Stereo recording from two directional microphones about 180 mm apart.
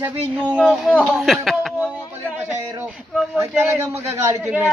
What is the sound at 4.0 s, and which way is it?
Speech, 15° right (ahead or behind).